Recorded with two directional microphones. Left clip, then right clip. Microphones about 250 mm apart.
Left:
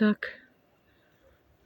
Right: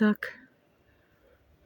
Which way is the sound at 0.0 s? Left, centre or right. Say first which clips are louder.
Even; centre.